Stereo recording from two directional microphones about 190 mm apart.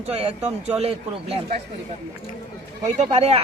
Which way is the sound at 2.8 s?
35° right (ahead or behind).